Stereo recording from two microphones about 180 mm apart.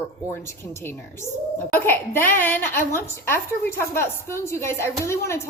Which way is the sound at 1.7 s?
10° left (ahead or behind).